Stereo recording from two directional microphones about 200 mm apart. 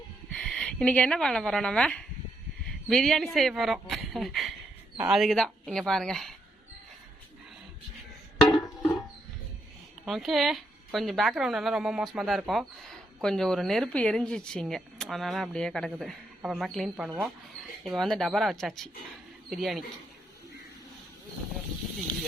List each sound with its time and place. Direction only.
0.3 s a woman's voice: 5° left (ahead or behind)
8.4 s a sound: 20° left (ahead or behind)
10.1 s a woman's voice: centre (ahead or behind)